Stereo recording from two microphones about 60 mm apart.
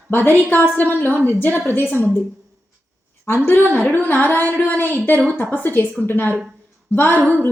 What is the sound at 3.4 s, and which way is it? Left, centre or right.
Music, left.